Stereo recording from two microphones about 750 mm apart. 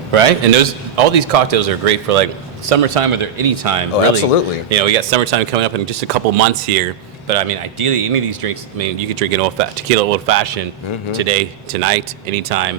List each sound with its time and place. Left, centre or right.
0.1 s a man's voice: right
7.3 s a man's voice: right